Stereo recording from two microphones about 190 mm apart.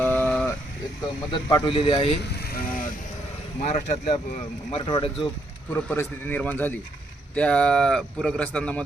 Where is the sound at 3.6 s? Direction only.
35° left (ahead or behind).